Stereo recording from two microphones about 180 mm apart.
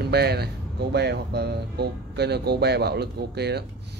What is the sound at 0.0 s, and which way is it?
Speech, 65° right (ahead or behind).